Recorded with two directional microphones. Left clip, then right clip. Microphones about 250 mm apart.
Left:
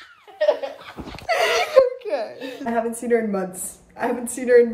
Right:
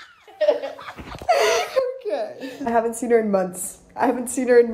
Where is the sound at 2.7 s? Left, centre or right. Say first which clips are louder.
Right 2 dB; centre.